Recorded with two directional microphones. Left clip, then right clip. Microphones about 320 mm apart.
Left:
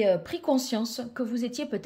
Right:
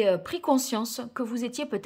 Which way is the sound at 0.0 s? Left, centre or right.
Centre.